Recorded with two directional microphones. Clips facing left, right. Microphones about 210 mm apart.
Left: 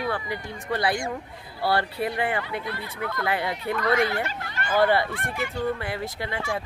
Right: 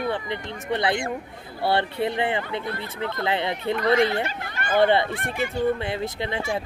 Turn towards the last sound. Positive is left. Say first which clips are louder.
# right 3 dB
turn(degrees=-20)  # may be behind; listen again after turning